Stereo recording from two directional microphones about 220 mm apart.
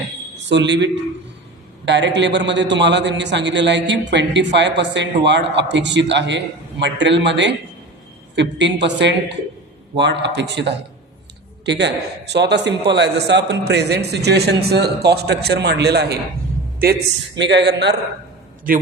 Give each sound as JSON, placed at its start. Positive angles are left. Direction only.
{"t": 0.3, "sound": "a man's voice", "side_deg": -55}